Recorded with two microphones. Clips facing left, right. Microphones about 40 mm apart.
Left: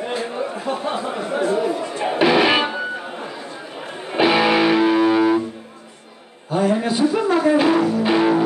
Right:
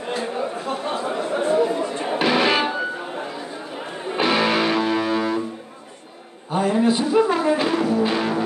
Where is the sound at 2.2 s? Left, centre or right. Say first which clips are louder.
Left 3 dB; centre.